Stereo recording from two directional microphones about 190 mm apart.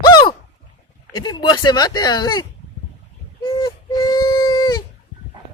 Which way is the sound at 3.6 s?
20° left (ahead or behind).